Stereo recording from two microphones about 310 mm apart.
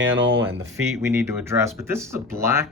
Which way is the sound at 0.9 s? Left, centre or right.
Centre.